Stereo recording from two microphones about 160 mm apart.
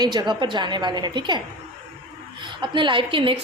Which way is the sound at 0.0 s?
25° right (ahead or behind).